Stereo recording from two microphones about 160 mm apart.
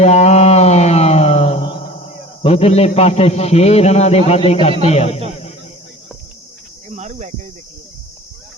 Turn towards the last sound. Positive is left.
turn(degrees=-45)  # may be behind; listen again after turning